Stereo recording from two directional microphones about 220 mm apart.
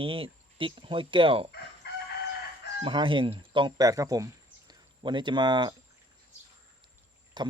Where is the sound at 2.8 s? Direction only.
20° right (ahead or behind).